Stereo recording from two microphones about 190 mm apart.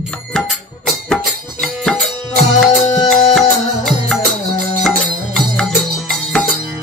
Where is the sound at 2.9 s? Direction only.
20° left (ahead or behind).